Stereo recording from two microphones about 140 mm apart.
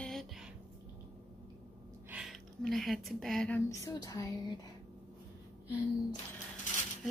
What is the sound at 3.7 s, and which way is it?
Speech, 25° left (ahead or behind).